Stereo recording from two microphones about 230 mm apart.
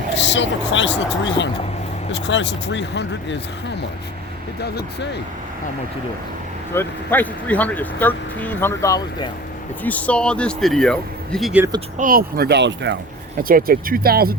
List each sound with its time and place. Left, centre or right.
0.3 s speech: left
6.7 s speech: centre
11.9 s speech: right
13.4 s speech: right